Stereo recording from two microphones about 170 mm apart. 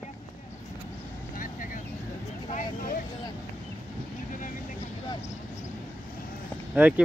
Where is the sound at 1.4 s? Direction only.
50° left (ahead or behind).